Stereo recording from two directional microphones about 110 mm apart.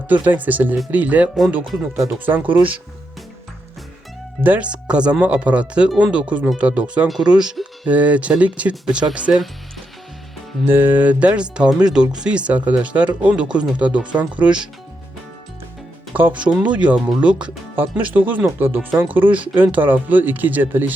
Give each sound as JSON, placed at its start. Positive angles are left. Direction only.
{"t": 0.1, "sound": "speech", "side_deg": -15}
{"t": 2.6, "sound": "speech", "side_deg": -55}
{"t": 4.4, "sound": "speech", "side_deg": -15}
{"t": 10.7, "sound": "speech", "side_deg": -20}
{"t": 16.1, "sound": "speech", "side_deg": -15}